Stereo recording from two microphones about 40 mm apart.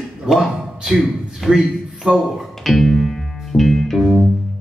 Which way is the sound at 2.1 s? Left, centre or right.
Right.